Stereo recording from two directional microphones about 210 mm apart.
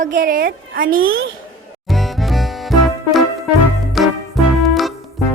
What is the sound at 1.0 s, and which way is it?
Speech, 70° right (ahead or behind).